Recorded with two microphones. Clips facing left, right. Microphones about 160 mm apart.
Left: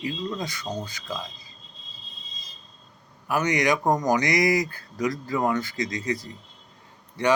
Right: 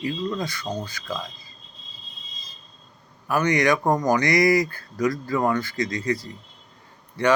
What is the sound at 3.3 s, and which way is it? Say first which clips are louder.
Speech: right 3 dB; 20° left (ahead or behind).